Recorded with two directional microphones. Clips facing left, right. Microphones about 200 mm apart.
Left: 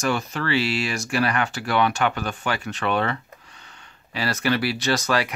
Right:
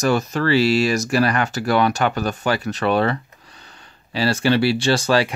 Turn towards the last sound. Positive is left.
turn(degrees=-30)  # may be behind; listen again after turning